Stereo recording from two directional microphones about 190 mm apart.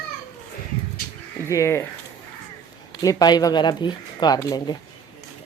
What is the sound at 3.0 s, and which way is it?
Speech, 20° left (ahead or behind).